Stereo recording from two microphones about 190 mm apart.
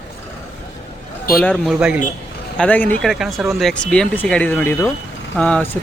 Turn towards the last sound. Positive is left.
turn(degrees=5)  # may be behind; listen again after turning